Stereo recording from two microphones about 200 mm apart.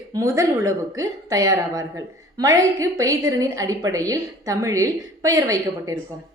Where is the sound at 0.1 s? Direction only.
15° right (ahead or behind).